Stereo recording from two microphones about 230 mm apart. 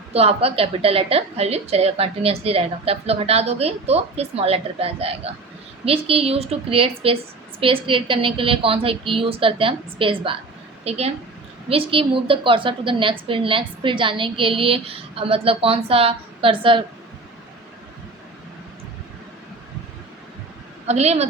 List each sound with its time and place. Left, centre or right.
0.1 s a woman's voice: right
20.8 s a woman's voice: right